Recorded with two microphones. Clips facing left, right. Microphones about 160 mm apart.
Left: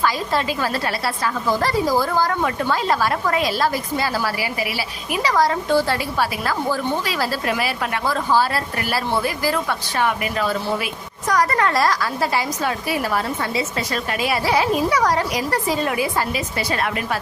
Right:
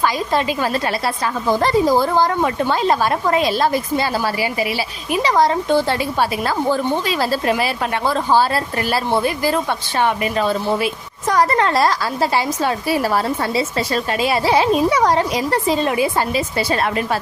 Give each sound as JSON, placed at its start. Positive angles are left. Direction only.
{"t": 0.0, "sound": "a woman's voice", "side_deg": -20}